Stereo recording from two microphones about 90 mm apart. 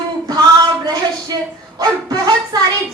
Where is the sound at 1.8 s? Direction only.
45° right (ahead or behind).